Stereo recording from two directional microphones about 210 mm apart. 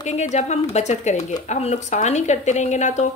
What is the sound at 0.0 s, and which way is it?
Speech, 35° left (ahead or behind).